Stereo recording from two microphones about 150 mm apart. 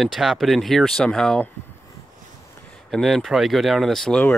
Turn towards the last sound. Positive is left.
turn(degrees=5)  # may be behind; listen again after turning